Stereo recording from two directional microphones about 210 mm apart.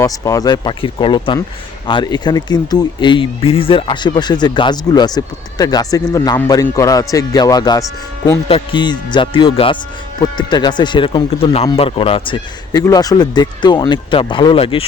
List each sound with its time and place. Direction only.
0.0 s speech: 15° left (ahead or behind)